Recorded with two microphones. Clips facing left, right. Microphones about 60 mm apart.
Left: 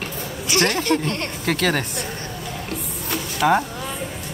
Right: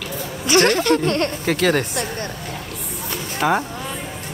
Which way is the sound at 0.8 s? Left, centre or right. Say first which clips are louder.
Right 4 dB; right.